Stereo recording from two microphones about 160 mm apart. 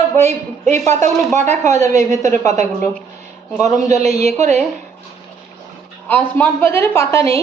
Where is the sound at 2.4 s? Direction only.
45° right (ahead or behind).